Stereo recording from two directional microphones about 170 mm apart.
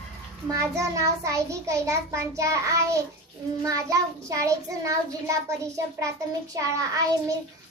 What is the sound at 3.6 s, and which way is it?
Child singing, 20° right (ahead or behind).